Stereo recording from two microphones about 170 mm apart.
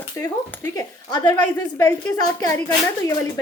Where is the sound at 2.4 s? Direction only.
20° left (ahead or behind).